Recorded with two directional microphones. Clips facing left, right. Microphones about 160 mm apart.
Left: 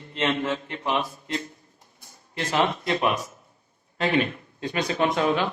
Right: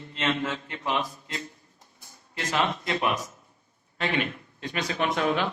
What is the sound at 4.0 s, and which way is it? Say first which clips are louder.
Speech: left 5 dB; 30° left (ahead or behind).